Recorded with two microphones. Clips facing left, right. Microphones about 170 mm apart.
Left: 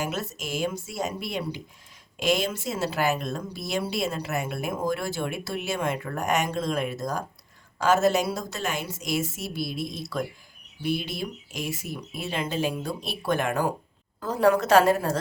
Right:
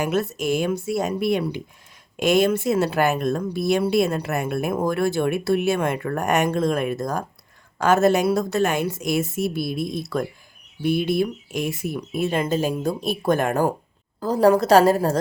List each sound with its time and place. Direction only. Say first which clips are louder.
0.0 s a woman's voice: right 8 dB; 60° right (ahead or behind); by 15.2 s 40° right (ahead or behind)